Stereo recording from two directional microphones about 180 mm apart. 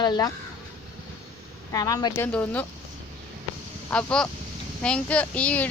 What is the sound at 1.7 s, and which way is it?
Speech, 20° left (ahead or behind).